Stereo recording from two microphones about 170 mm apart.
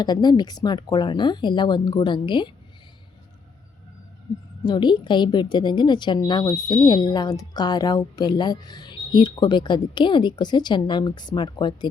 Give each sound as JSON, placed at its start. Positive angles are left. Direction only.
{"t": 0.0, "sound": "a woman's voice", "side_deg": 25}
{"t": 4.6, "sound": "a woman's voice", "side_deg": 25}